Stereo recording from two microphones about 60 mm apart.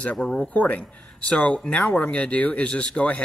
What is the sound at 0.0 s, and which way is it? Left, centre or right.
Speech, left.